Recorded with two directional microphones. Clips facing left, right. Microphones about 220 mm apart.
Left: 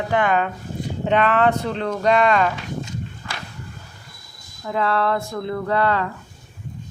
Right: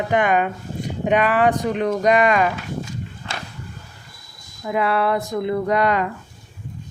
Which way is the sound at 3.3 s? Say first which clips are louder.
Right 2 dB; 25° right (ahead or behind).